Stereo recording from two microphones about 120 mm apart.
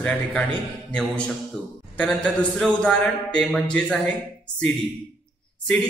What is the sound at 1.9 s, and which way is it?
A man's voice, 5° left (ahead or behind).